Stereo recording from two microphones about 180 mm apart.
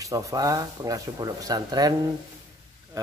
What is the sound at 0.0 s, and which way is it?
Speech, 20° right (ahead or behind).